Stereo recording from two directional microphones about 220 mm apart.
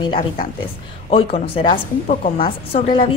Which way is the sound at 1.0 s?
25° left (ahead or behind).